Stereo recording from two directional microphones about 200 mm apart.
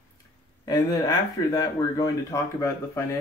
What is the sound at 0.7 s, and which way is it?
Speech, 20° left (ahead or behind).